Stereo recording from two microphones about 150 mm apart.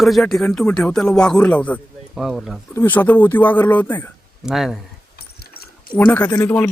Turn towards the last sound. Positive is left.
turn(degrees=20)  # may be behind; listen again after turning